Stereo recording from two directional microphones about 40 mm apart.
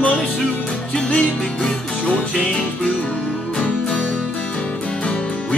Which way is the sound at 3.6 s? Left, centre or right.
Left.